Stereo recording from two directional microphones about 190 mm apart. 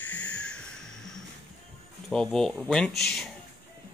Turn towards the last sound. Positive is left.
turn(degrees=5)  # may be behind; listen again after turning